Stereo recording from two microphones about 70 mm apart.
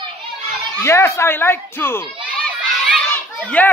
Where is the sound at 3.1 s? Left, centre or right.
Left.